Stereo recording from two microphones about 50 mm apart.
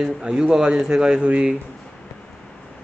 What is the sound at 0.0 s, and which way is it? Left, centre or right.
A man's voice, centre.